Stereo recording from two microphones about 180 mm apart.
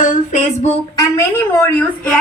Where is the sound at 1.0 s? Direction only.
15° left (ahead or behind).